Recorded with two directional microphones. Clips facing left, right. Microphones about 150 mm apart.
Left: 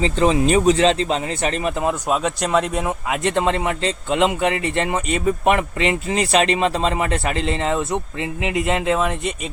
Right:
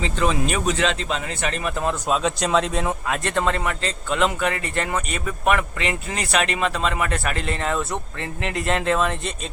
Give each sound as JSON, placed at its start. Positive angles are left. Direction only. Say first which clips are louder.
{"t": 0.0, "sound": "speech", "louder": "left 5 dB", "side_deg": 30}
{"t": 1.8, "sound": "speech", "louder": "even", "side_deg": 10}
{"t": 3.2, "sound": "a man's voice", "louder": "left 4 dB", "side_deg": 20}